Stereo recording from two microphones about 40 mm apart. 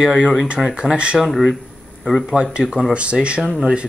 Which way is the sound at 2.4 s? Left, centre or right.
Right.